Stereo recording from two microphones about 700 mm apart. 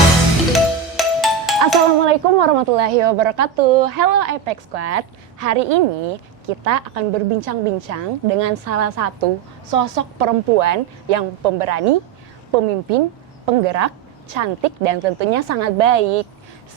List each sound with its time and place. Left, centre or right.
0.5 s music: centre
2.0 s a woman's voice: right